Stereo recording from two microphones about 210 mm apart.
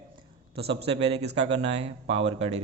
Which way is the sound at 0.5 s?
30° right (ahead or behind).